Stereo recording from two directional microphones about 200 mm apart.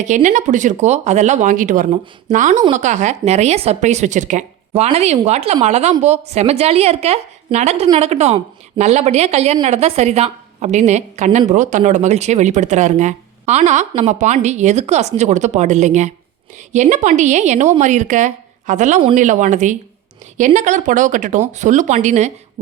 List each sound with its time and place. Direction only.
0.0 s a woman's voice: 40° right (ahead or behind)